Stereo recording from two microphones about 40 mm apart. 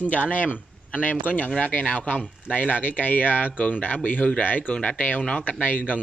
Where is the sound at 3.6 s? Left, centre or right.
Left.